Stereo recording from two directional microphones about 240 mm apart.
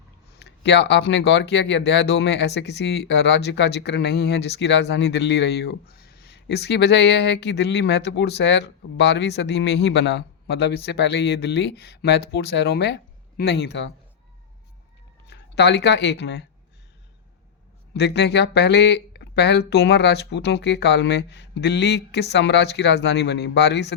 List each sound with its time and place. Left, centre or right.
0.3 s speech: left
15.3 s speech: left
17.9 s speech: left